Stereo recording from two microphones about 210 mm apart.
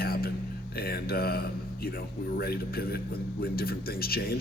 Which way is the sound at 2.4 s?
45° left (ahead or behind).